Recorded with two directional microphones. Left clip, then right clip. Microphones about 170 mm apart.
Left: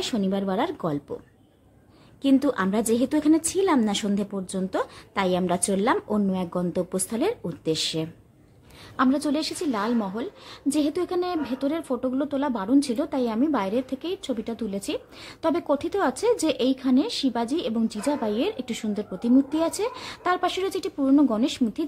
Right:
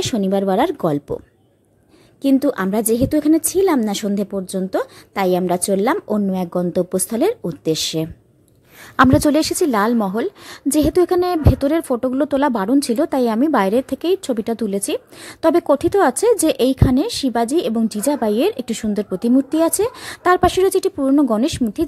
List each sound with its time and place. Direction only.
0.0 s a woman's voice: 35° right (ahead or behind)
2.2 s a woman's voice: 30° right (ahead or behind)